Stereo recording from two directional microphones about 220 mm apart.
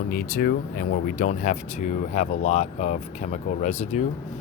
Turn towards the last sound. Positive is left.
turn(degrees=30)  # may be behind; listen again after turning